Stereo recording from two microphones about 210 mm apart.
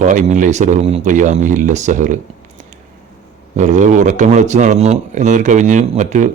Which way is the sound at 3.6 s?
35° right (ahead or behind).